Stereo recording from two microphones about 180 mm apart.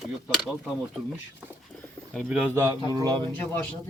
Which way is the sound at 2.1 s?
Centre (ahead or behind).